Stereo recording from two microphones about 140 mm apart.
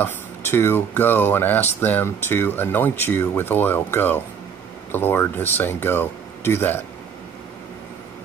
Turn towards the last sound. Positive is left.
turn(degrees=15)  # may be behind; listen again after turning